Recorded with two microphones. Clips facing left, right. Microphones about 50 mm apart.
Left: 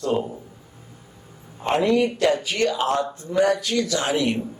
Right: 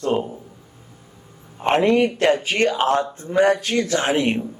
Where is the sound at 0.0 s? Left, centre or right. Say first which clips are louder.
Right 2 dB; right.